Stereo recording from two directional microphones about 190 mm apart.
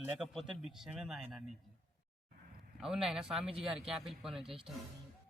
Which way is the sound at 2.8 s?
Centre (ahead or behind).